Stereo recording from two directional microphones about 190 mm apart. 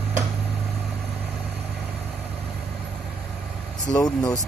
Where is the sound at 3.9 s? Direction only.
20° left (ahead or behind).